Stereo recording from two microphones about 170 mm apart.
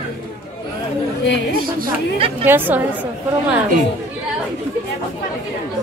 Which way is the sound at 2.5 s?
10° right (ahead or behind).